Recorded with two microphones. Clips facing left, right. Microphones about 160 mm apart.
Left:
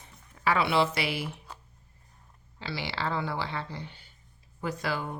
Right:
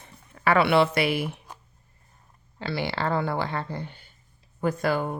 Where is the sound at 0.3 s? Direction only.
60° right (ahead or behind).